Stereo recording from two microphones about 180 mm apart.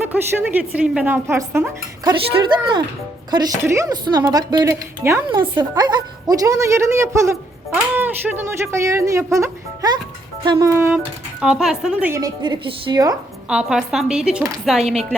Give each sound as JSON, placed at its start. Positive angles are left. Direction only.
{"t": 0.0, "sound": "speech", "side_deg": -10}
{"t": 2.0, "sound": "speech", "side_deg": -25}
{"t": 13.5, "sound": "speech", "side_deg": -5}